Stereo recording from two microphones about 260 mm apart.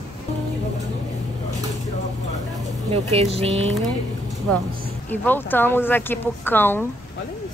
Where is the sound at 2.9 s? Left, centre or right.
Right.